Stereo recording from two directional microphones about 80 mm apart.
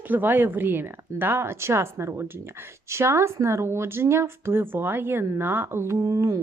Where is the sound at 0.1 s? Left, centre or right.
Right.